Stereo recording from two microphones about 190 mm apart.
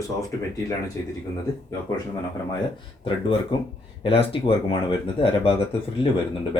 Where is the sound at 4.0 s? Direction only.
30° left (ahead or behind).